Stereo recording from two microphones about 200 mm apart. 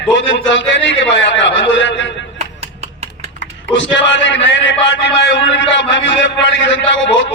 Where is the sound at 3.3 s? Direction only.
65° left (ahead or behind).